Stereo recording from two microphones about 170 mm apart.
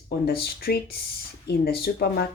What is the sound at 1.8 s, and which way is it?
Speech, 70° left (ahead or behind).